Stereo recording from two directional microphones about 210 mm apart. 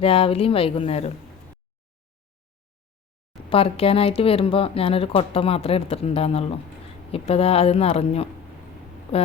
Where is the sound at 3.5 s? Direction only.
25° left (ahead or behind).